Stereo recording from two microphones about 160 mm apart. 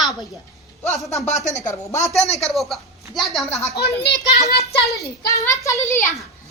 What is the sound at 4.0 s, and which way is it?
Speech, 90° left.